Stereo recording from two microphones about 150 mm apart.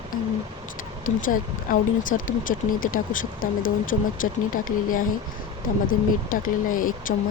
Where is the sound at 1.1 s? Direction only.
65° left (ahead or behind).